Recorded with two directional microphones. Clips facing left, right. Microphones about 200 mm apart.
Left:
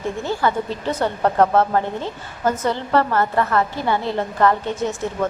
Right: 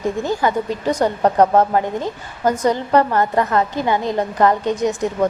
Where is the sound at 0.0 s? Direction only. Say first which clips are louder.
Right 3 dB; 15° right (ahead or behind).